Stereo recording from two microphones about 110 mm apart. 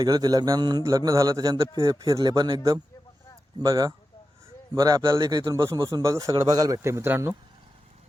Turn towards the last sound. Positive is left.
turn(degrees=-20)  # may be behind; listen again after turning